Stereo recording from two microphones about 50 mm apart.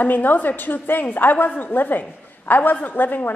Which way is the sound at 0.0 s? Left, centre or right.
Left.